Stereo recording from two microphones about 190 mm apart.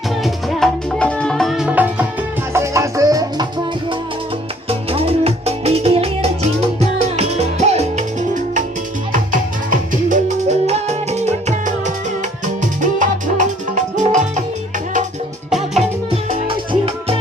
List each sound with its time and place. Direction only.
0.2 s music: centre (ahead or behind); by 3.4 s 20° right (ahead or behind)
4.7 s music: 30° right (ahead or behind)
15.4 s music: centre (ahead or behind)
16.3 s music: 30° right (ahead or behind)